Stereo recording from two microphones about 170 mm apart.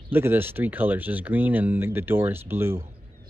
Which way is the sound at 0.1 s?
15° right (ahead or behind).